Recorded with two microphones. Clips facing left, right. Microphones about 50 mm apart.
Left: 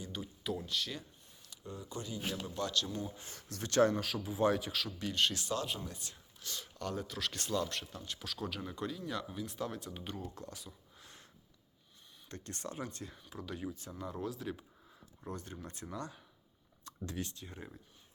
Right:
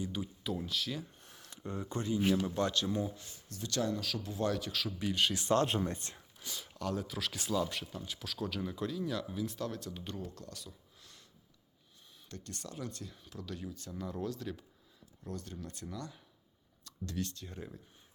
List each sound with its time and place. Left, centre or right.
0.0 s speech: centre
1.2 s a sound: right
1.5 s speech: right; by 3.1 s centre
3.6 s speech: left
4.2 s speech: centre
4.7 s speech: centre
4.9 s speech: centre
5.5 s speech: right
6.4 s speech: centre
10.3 s a sound: left
12.3 s speech: left
13.3 s speech: centre
14.0 s speech: centre
15.2 s speech: left; by 17.7 s centre